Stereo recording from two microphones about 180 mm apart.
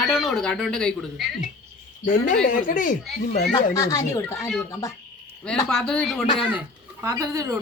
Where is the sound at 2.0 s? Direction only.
45° left (ahead or behind).